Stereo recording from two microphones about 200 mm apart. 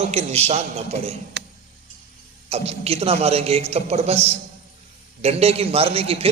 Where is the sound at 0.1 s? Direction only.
30° right (ahead or behind).